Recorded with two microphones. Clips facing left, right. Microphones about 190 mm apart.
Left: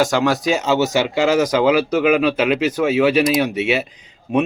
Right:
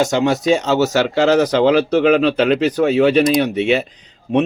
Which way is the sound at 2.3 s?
10° left (ahead or behind).